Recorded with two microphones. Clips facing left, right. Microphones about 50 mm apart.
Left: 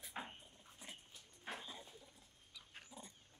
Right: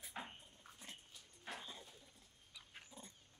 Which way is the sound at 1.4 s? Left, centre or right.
Centre.